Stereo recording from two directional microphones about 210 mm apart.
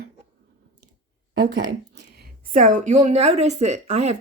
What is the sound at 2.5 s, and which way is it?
A woman's voice, 40° right (ahead or behind).